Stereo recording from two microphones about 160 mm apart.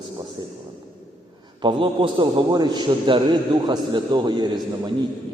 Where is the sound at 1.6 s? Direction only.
30° right (ahead or behind).